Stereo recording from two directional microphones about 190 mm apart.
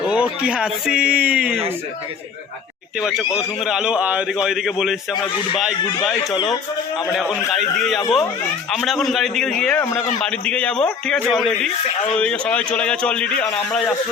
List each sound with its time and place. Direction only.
0.0 s a man's voice: 5° right (ahead or behind)
3.0 s a man's voice: 5° right (ahead or behind)
6.3 s speech: 25° left (ahead or behind)
7.1 s a man's voice: centre (ahead or behind)